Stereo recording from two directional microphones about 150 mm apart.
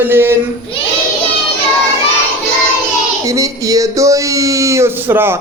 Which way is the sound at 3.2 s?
20° right (ahead or behind).